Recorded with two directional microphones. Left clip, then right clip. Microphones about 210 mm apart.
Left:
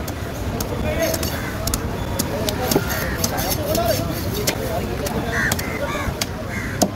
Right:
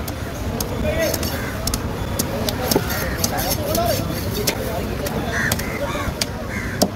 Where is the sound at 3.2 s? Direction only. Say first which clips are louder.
Right 1 dB; centre (ahead or behind).